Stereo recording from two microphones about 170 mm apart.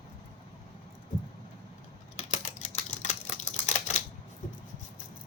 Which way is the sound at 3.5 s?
45° left (ahead or behind).